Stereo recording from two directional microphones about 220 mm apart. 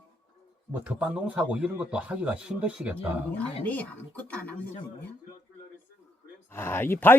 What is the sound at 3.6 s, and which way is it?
Speech, 5° left (ahead or behind).